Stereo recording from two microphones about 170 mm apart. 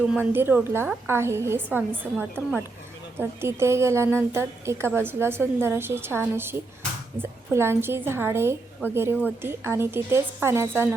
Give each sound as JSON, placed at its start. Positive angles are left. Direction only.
{"t": 0.1, "sound": "a woman's voice", "side_deg": -10}